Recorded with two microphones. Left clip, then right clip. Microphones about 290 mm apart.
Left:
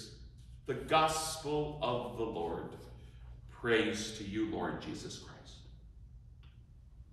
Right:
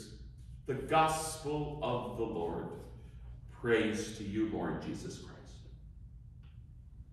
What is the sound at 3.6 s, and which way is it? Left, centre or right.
A man's voice, centre.